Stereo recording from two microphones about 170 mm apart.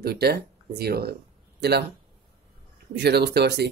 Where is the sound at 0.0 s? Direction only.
65° right (ahead or behind).